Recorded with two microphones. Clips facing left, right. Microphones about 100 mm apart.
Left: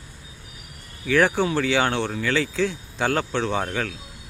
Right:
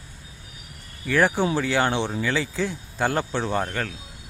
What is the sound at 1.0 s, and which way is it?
Speech, 5° right (ahead or behind).